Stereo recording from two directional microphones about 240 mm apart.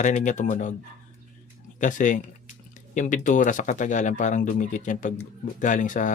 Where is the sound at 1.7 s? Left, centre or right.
Left.